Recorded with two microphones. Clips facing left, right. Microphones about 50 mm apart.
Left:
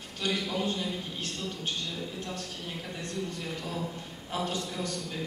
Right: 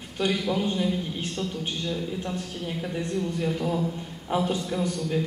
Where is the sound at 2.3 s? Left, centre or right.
Centre.